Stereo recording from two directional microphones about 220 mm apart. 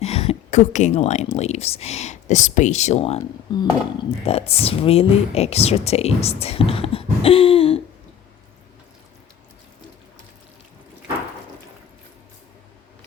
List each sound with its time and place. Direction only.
0.0 s a woman's voice: 30° left (ahead or behind)